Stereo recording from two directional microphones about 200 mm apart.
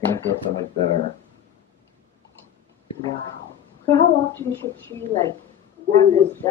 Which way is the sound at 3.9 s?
10° left (ahead or behind).